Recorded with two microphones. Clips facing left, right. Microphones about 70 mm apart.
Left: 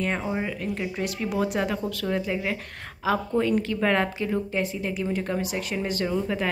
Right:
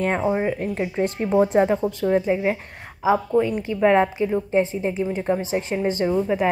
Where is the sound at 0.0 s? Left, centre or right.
Right.